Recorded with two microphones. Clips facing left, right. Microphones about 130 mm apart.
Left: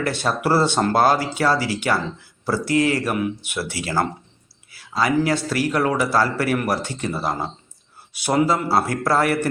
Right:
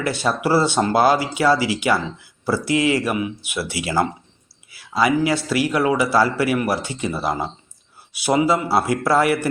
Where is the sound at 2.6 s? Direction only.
40° left (ahead or behind).